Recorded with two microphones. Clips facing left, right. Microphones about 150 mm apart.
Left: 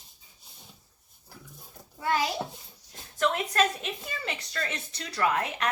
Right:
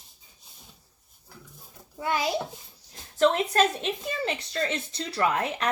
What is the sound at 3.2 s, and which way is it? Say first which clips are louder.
Speech: right 4 dB; 30° right (ahead or behind).